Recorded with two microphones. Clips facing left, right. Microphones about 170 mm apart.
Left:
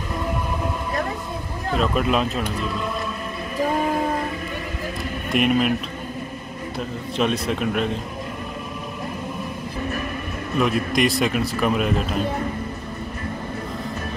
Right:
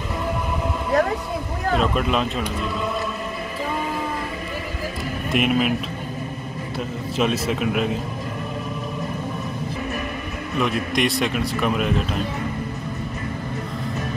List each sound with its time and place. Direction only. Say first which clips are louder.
1.8 s a man's voice: left 2 dB; centre (ahead or behind)
3.6 s train: left 6 dB; 50° left (ahead or behind)
5.3 s a man's voice: left 1 dB; centre (ahead or behind)
7.2 s a man's voice: even; 5° right (ahead or behind)
10.6 s a man's voice: left 2 dB; centre (ahead or behind)